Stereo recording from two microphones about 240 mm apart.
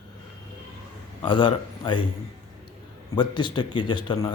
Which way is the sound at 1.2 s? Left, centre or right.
Centre.